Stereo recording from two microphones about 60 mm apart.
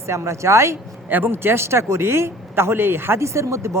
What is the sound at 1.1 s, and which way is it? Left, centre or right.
Speech, right.